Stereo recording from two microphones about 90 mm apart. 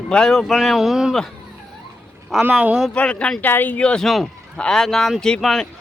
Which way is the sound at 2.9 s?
15° left (ahead or behind).